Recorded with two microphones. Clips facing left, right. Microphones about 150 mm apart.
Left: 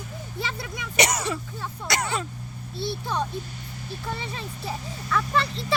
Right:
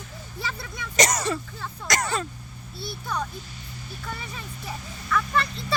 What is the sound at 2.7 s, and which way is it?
Speech, 25° left (ahead or behind).